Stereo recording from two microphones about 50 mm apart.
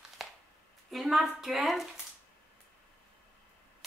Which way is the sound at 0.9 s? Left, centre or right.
Centre.